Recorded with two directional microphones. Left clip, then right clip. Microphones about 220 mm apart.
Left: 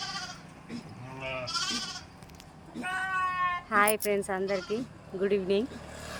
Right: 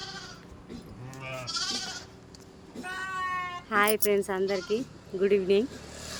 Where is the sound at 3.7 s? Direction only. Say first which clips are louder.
Right 3 dB; 10° right (ahead or behind).